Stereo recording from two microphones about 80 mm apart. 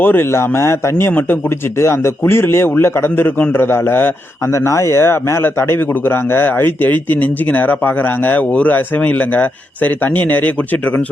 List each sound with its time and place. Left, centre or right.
0.0 s a man's voice: left